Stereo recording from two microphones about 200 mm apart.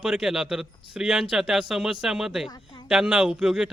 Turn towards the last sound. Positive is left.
turn(degrees=-5)  # may be behind; listen again after turning